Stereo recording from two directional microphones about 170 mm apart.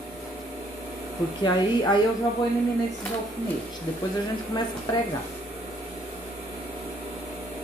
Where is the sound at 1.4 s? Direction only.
25° left (ahead or behind).